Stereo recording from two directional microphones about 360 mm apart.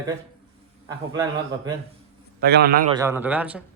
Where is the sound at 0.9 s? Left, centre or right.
Centre.